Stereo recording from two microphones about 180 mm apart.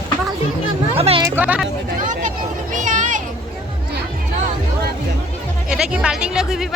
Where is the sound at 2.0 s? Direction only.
45° right (ahead or behind).